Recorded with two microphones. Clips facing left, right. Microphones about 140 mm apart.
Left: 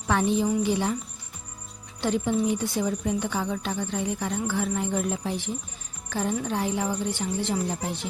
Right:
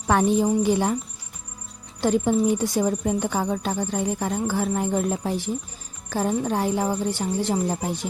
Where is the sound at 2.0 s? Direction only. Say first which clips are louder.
Right 4 dB; 40° right (ahead or behind).